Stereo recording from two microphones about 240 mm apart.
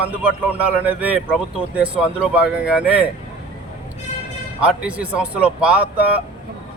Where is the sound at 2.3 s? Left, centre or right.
Centre.